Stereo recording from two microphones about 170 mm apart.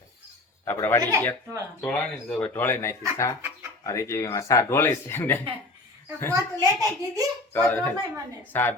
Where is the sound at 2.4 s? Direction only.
10° left (ahead or behind).